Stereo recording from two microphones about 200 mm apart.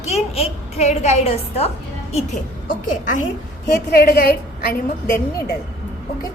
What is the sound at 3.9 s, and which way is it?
Speech, 50° left (ahead or behind).